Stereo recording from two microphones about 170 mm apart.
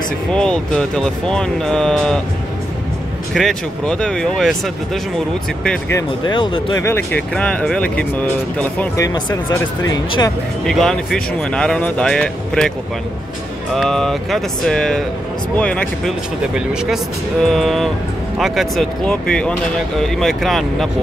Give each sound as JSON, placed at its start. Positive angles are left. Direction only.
{"t": 0.3, "sound": "speech", "side_deg": 5}
{"t": 3.3, "sound": "speech", "side_deg": 5}
{"t": 5.6, "sound": "speech", "side_deg": 5}
{"t": 5.9, "sound": "speech", "side_deg": 25}
{"t": 6.8, "sound": "speech", "side_deg": 15}
{"t": 9.0, "sound": "speech", "side_deg": 20}
{"t": 10.7, "sound": "speech", "side_deg": 0}
{"t": 13.7, "sound": "speech", "side_deg": 0}
{"t": 16.5, "sound": "speech", "side_deg": -5}